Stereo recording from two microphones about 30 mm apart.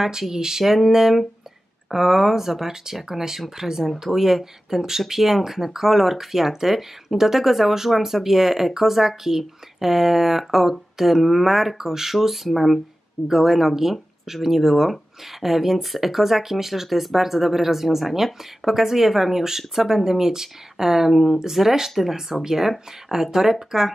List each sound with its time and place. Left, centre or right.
0.3 s speech: centre